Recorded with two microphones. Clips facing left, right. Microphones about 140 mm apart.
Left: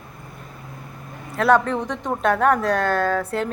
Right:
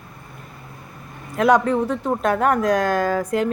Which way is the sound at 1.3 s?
10° right (ahead or behind).